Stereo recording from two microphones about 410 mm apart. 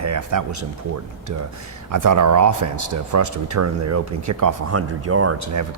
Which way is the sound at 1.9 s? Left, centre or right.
Right.